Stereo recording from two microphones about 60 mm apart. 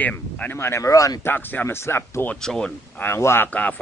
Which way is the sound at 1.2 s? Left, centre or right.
Left.